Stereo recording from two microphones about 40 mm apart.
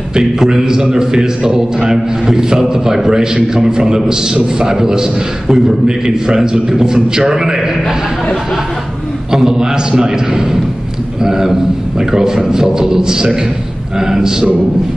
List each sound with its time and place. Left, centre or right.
0.1 s a man's voice: centre
9.3 s a man's voice: centre